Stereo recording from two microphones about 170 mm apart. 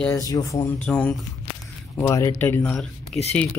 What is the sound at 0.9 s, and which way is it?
Speech, 5° left (ahead or behind).